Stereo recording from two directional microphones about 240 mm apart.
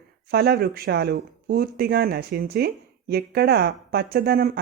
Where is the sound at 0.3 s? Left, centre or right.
Right.